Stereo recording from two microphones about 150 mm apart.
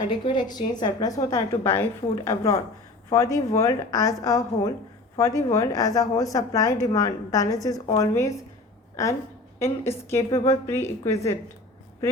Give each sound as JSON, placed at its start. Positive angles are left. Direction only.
{"t": 0.3, "sound": "a woman's voice", "side_deg": 30}